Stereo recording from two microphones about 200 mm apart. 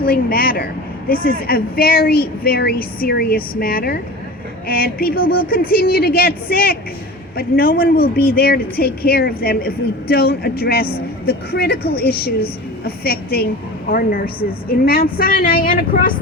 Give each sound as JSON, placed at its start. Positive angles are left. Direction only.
{"t": 0.0, "sound": "a woman's voice", "side_deg": 45}